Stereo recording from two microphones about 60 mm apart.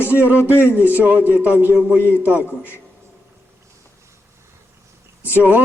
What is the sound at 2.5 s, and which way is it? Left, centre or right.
Speech, left.